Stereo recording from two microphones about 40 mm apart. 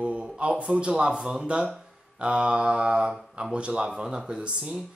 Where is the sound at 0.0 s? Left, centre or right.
Right.